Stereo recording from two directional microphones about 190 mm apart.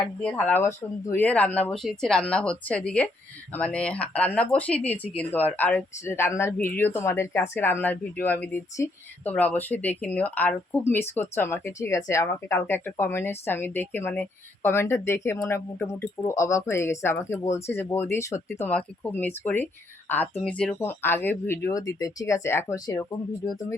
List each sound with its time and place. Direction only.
0.0 s speech: 5° left (ahead or behind)